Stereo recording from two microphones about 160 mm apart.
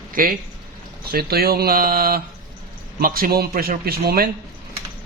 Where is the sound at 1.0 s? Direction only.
70° right (ahead or behind).